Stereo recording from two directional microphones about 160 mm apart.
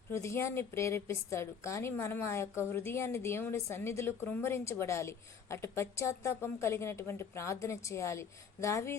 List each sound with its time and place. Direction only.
0.1 s a woman's voice: 15° left (ahead or behind)